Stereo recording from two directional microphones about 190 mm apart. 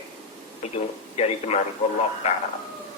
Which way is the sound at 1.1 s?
35° left (ahead or behind).